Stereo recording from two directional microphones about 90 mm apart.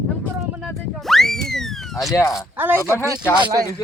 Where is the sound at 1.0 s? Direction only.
5° left (ahead or behind).